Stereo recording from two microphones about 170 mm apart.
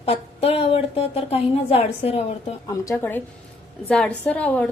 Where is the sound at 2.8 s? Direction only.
15° left (ahead or behind).